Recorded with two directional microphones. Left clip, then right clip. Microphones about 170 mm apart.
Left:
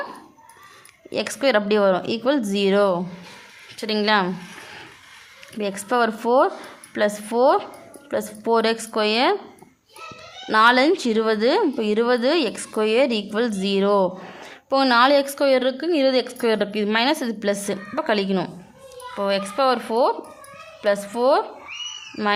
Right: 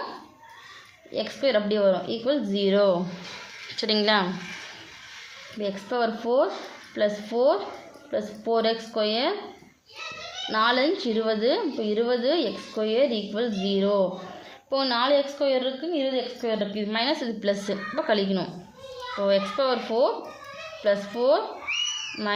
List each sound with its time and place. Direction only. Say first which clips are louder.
1.1 s a woman's voice: left 4 dB; 40° left (ahead or behind)
5.5 s a woman's voice: left 6 dB; 30° left (ahead or behind)
10.5 s a woman's voice: left 7 dB; 35° left (ahead or behind)